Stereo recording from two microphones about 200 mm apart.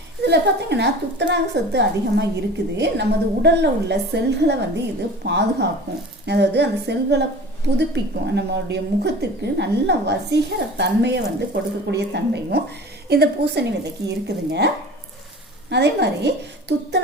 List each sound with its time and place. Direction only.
0.2 s a woman's voice: 55° right (ahead or behind)
15.7 s a woman's voice: 55° right (ahead or behind)